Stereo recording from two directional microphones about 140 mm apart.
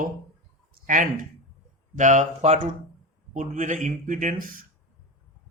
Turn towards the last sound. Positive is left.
turn(degrees=-85)